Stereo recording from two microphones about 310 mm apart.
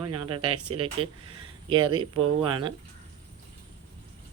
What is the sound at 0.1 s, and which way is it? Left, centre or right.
Speech, right.